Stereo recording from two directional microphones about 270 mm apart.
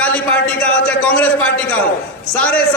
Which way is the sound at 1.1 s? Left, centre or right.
Centre.